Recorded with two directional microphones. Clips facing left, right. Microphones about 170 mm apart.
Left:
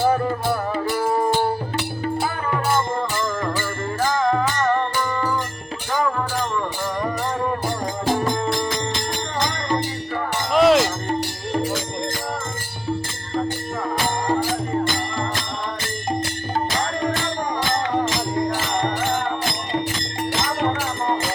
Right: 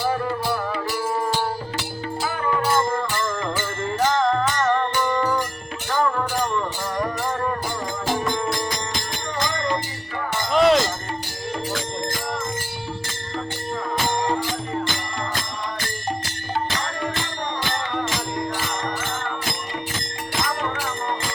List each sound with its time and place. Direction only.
0.9 s music: 55° left (ahead or behind)
4.2 s music: 5° left (ahead or behind)
10.5 s music: centre (ahead or behind)